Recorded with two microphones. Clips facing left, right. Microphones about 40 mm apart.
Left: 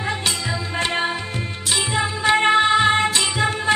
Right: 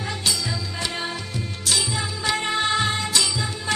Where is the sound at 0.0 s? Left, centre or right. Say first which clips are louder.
Left 3 dB; left.